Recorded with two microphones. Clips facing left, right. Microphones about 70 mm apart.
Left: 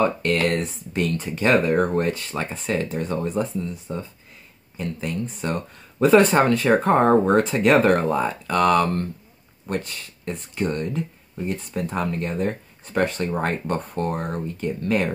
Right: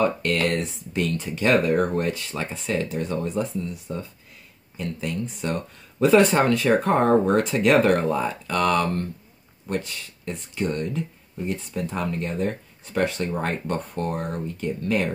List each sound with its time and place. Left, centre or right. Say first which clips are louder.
0.0 s speech: left 2 dB; left
4.7 s speech: left 1 dB; left